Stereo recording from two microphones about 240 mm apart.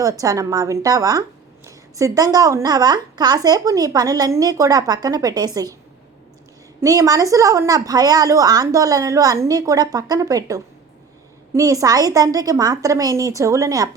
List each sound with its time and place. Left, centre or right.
0.0 s a woman's voice: centre
6.8 s a woman's voice: centre